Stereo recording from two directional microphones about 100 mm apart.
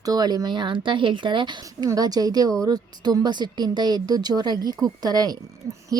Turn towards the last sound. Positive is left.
turn(degrees=-40)  # may be behind; listen again after turning